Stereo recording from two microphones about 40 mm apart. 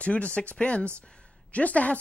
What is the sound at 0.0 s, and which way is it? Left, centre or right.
Speech, left.